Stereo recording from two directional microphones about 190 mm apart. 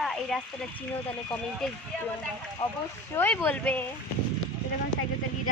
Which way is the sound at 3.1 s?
15° left (ahead or behind).